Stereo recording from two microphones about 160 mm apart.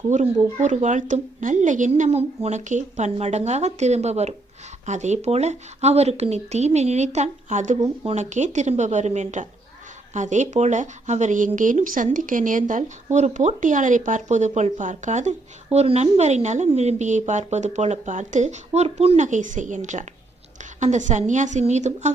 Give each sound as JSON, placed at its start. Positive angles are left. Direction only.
{"t": 0.6, "sound": "speech", "side_deg": -50}